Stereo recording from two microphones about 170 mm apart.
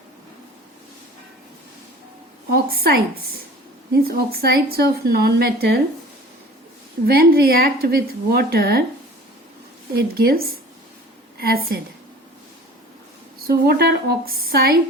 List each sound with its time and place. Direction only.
2.5 s a woman's voice: 60° right (ahead or behind)
4.0 s a woman's voice: 65° right (ahead or behind)
7.1 s a woman's voice: 65° right (ahead or behind)
9.9 s a woman's voice: 65° right (ahead or behind)
13.5 s a woman's voice: 65° right (ahead or behind)